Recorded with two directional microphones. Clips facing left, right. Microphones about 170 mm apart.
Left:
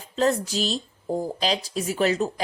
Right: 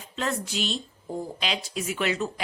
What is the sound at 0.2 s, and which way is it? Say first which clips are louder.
Speech: left 7 dB; 35° left (ahead or behind).